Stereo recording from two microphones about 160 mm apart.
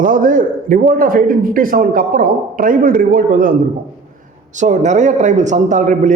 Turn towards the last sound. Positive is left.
turn(degrees=-50)  # may be behind; listen again after turning